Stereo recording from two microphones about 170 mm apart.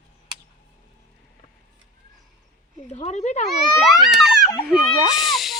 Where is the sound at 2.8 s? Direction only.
40° left (ahead or behind).